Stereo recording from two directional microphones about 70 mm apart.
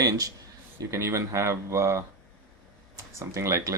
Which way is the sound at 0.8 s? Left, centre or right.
Right.